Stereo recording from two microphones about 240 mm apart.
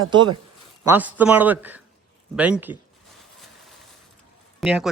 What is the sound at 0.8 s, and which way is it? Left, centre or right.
A man's voice, centre.